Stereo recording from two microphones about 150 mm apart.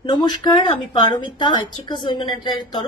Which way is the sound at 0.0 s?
30° left (ahead or behind).